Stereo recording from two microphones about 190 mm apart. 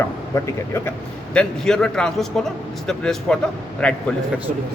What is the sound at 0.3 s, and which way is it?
A man's voice, 15° left (ahead or behind).